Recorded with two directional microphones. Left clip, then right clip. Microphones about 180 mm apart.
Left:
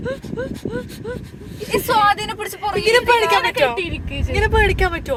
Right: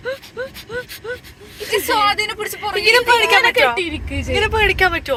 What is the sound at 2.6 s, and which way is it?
Speech, 20° left (ahead or behind).